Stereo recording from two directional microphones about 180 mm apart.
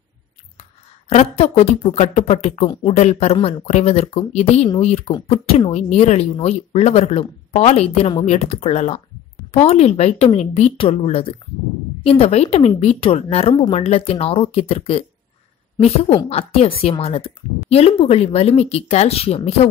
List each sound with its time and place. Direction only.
0.6 s speech: 35° left (ahead or behind)
2.6 s a woman's voice: 25° left (ahead or behind)